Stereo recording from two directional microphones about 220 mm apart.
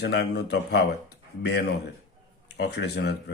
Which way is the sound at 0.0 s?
50° left (ahead or behind).